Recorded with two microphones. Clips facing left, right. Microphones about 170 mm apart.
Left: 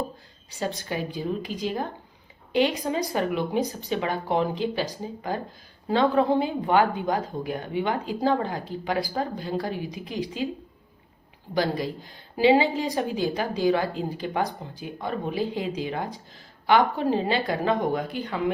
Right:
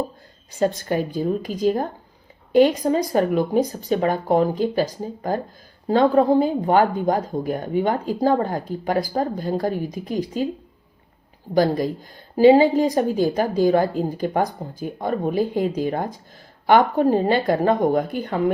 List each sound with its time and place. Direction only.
0.5 s speech: 50° right (ahead or behind)
11.5 s speech: 45° right (ahead or behind)